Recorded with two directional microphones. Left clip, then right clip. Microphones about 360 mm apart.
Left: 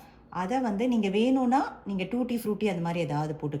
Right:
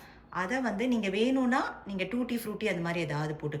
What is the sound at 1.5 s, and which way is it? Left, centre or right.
Cutlery, centre.